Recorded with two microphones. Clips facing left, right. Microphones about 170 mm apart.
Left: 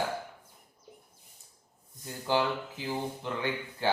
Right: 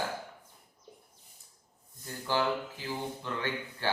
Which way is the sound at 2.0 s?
15° left (ahead or behind).